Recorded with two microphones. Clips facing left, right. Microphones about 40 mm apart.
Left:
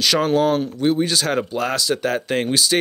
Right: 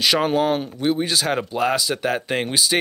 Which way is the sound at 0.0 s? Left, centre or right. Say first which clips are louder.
Left 1 dB; centre.